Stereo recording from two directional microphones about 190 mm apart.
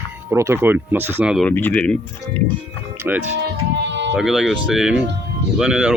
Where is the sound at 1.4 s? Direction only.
10° left (ahead or behind).